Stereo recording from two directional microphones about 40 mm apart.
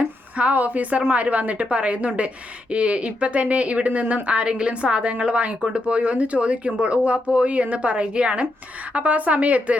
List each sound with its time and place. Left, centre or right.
0.0 s a woman's voice: right